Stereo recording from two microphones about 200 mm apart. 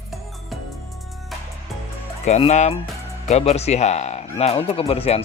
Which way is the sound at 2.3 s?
35° left (ahead or behind).